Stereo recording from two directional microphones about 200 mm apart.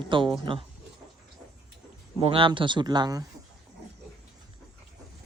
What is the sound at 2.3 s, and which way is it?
Speech, 25° right (ahead or behind).